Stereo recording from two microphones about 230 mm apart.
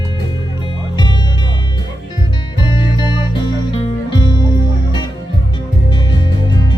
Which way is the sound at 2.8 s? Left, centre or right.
Left.